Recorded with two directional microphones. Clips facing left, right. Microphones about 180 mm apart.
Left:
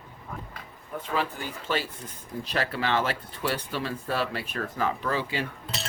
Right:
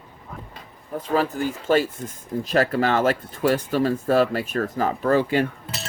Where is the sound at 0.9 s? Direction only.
40° right (ahead or behind).